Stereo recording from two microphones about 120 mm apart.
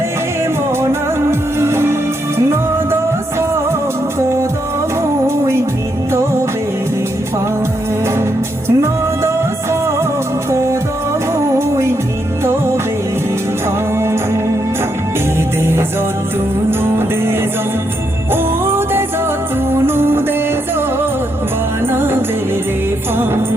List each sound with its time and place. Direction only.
1.3 s music: 20° right (ahead or behind)
5.2 s music: 20° right (ahead or behind)
8.6 s music: 25° right (ahead or behind)
10.5 s music: 25° right (ahead or behind)
18.6 s music: 20° right (ahead or behind)
21.8 s music: 20° right (ahead or behind)